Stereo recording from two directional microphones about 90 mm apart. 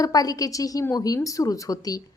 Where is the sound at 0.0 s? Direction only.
40° left (ahead or behind).